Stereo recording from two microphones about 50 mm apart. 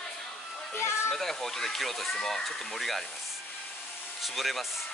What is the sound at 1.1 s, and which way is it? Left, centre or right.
Speech, centre.